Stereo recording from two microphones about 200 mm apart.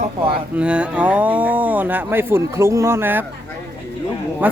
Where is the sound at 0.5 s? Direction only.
5° right (ahead or behind).